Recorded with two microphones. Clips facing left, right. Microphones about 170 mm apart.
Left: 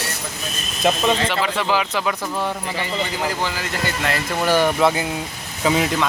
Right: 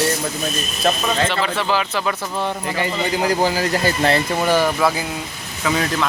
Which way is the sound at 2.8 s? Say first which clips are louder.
Right 5 dB; 40° right (ahead or behind).